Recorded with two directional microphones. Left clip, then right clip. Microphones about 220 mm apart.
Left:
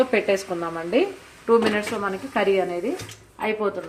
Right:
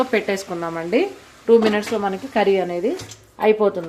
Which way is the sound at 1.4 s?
30° right (ahead or behind).